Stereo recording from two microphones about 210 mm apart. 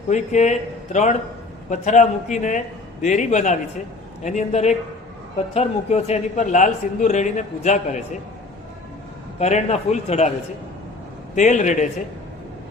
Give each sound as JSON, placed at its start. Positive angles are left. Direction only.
{"t": 0.1, "sound": "speech", "side_deg": 35}
{"t": 9.4, "sound": "speech", "side_deg": 30}
{"t": 11.3, "sound": "speech", "side_deg": 35}